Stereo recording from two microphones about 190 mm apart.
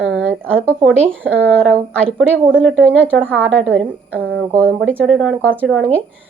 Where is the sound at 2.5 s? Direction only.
90° right.